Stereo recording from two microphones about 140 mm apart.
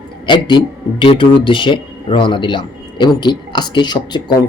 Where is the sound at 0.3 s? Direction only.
35° left (ahead or behind).